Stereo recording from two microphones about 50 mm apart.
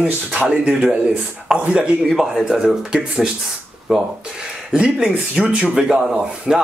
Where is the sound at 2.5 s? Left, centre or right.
Centre.